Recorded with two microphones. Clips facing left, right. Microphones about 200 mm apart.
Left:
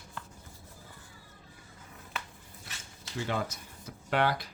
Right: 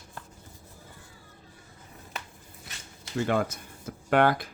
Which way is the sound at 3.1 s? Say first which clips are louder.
Right 7 dB; 55° right (ahead or behind).